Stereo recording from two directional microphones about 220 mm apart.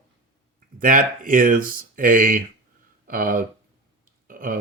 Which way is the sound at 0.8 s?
40° right (ahead or behind).